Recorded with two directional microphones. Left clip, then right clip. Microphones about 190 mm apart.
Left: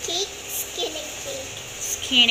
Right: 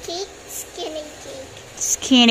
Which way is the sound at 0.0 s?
20° right (ahead or behind).